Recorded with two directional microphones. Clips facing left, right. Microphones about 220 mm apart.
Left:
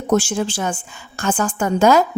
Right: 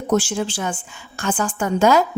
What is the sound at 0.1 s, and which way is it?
A woman's voice, 45° left (ahead or behind).